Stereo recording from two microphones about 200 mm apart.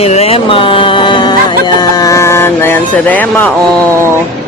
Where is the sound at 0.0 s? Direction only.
30° left (ahead or behind); by 3.5 s 10° left (ahead or behind).